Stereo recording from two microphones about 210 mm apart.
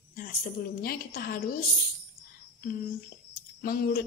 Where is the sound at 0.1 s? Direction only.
40° left (ahead or behind).